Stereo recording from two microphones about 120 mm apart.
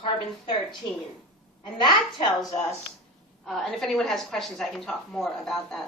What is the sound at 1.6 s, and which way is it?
Speech, 40° left (ahead or behind).